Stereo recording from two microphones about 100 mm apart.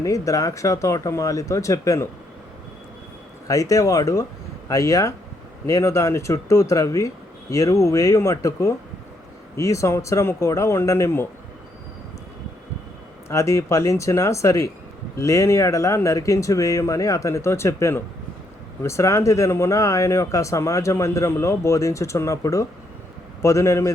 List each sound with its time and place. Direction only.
0.0 s speech: 35° left (ahead or behind)
3.4 s speech: 35° left (ahead or behind)
13.2 s speech: 30° left (ahead or behind)